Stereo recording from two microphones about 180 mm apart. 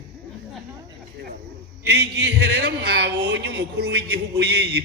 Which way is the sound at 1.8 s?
65° right (ahead or behind).